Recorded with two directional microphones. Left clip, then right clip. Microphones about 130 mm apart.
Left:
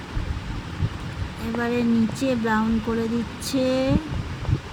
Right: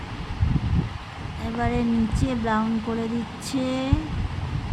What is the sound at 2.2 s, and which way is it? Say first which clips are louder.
Speech: left 1 dB; 10° left (ahead or behind).